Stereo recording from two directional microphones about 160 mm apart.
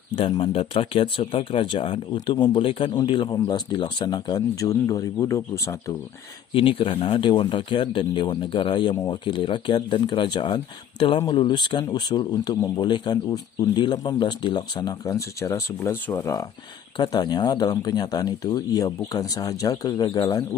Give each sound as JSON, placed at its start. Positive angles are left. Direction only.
{"t": 0.1, "sound": "speech", "side_deg": 35}
{"t": 6.5, "sound": "speech", "side_deg": 35}